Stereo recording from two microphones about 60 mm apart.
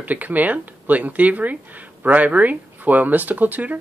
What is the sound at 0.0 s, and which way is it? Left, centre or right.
Speech, right.